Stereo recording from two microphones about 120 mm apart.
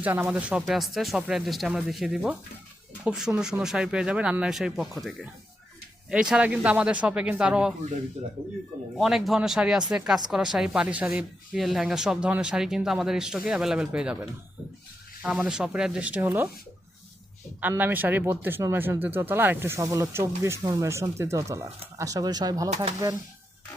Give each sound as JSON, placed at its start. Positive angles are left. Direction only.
{"t": 0.0, "sound": "speech", "side_deg": -15}
{"t": 0.6, "sound": "speech", "side_deg": 0}
{"t": 6.1, "sound": "speech", "side_deg": -5}
{"t": 8.2, "sound": "speech", "side_deg": -60}
{"t": 9.0, "sound": "speech", "side_deg": 0}
{"t": 17.6, "sound": "speech", "side_deg": -15}